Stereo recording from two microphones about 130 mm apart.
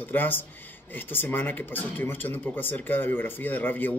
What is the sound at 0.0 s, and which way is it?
A man's voice, 15° left (ahead or behind).